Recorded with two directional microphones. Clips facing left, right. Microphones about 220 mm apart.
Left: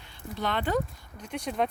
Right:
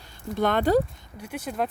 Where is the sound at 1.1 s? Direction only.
5° right (ahead or behind).